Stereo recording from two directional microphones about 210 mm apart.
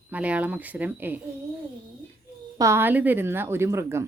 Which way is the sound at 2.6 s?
15° right (ahead or behind).